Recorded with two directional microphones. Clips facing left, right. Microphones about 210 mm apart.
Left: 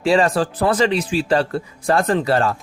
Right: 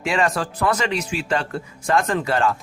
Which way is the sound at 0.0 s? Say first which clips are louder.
Left 6 dB; 30° left (ahead or behind).